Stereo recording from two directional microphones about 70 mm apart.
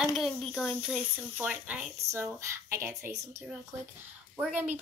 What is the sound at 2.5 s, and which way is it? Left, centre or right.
Speech, right.